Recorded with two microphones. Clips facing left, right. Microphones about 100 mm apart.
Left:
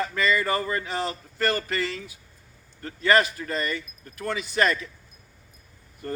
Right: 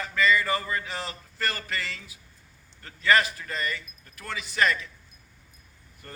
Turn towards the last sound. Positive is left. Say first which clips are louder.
# left 12 dB
turn(degrees=35)  # may be behind; listen again after turning